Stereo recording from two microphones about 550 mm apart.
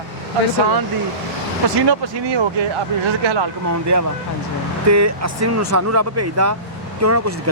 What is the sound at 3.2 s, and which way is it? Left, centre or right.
Speech, right.